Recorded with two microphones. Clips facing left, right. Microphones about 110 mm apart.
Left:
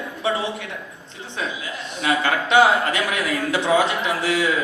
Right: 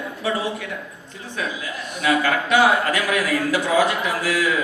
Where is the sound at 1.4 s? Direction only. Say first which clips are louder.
Right 1 dB; 25° left (ahead or behind).